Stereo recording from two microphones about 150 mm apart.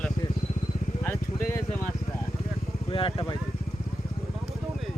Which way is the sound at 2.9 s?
35° left (ahead or behind).